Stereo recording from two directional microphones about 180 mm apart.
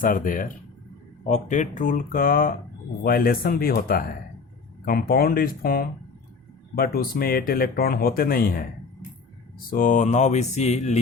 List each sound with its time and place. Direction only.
0.0 s speech: 50° left (ahead or behind)
9.6 s mantra: 50° left (ahead or behind)